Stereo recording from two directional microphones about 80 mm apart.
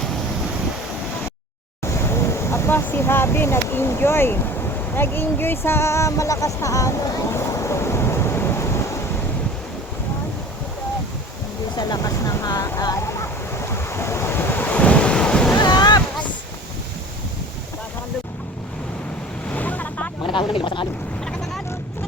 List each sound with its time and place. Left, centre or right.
1.8 s speech: left
4.9 s a sound: left
11.8 s speech: left
13.0 s waves: left; by 15.5 s centre
15.5 s waves: left
19.5 s waves: centre
20.2 s speech: left